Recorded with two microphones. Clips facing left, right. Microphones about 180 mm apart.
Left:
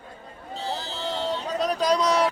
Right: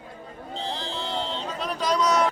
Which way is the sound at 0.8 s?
40° left (ahead or behind).